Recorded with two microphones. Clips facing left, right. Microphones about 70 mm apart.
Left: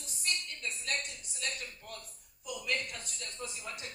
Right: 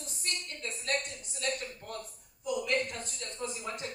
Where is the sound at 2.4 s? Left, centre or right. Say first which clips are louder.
Right 6 dB; right.